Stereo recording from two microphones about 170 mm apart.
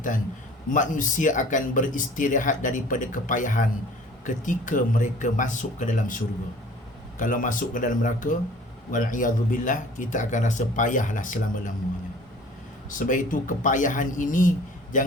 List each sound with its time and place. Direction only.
0.7 s speech: 50° left (ahead or behind)
12.9 s speech: 50° left (ahead or behind)